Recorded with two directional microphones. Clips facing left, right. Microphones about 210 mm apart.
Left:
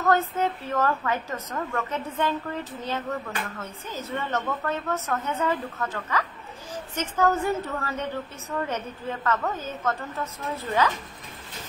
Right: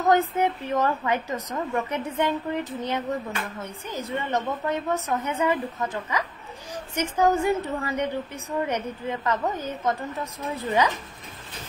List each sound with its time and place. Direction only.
0.0 s a woman's voice: 15° right (ahead or behind)